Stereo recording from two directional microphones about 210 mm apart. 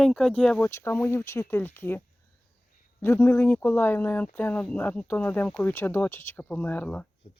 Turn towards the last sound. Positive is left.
turn(degrees=5)  # may be behind; listen again after turning